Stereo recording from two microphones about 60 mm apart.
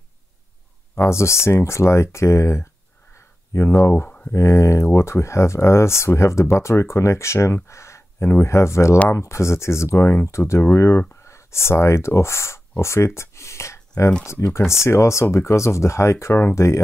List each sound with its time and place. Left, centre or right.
0.9 s speech: left
10.2 s speech: left